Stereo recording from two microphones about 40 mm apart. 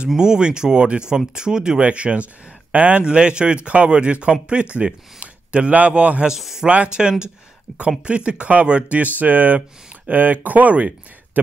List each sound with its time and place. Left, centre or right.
0.2 s a man's voice: centre
1.8 s a man's voice: right
6.2 s speech: centre
6.7 s a man's voice: right
8.9 s speech: right